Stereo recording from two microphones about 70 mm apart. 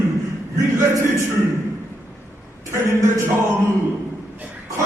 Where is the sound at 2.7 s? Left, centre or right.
Right.